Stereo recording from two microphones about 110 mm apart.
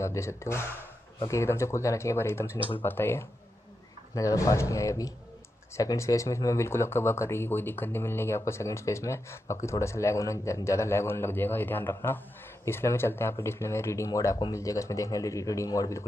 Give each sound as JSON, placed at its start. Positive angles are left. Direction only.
{"t": 0.0, "sound": "speech", "side_deg": 25}